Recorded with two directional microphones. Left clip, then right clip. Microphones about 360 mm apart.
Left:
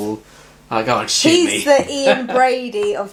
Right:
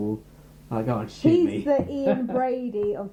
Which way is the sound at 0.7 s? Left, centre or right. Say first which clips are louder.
Left 11 dB; centre.